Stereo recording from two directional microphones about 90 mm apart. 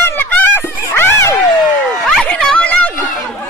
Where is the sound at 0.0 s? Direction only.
20° left (ahead or behind).